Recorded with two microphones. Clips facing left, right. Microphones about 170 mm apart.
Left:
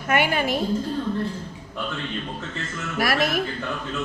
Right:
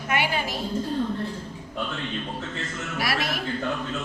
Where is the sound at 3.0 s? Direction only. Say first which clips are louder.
Left 6 dB; 50° left (ahead or behind).